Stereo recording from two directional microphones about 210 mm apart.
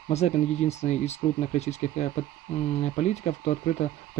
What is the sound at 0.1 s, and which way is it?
Speech, 30° left (ahead or behind).